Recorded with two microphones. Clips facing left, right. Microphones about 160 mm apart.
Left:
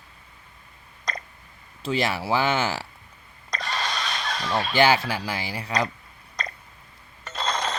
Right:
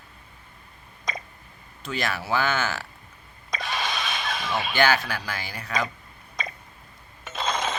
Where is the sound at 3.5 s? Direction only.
Centre (ahead or behind).